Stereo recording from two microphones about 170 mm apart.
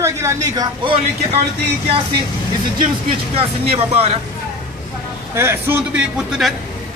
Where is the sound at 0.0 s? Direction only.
15° right (ahead or behind).